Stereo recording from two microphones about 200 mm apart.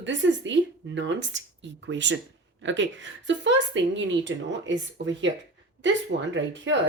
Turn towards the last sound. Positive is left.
turn(degrees=-65)  # may be behind; listen again after turning